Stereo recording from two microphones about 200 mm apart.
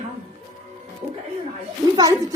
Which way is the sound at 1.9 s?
15° right (ahead or behind).